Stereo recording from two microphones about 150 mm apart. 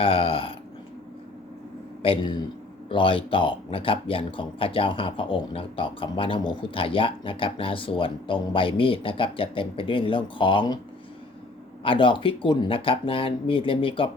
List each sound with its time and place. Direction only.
0.0 s a sound: 35° left (ahead or behind)
2.0 s speech: 35° left (ahead or behind)
11.8 s speech: 35° left (ahead or behind)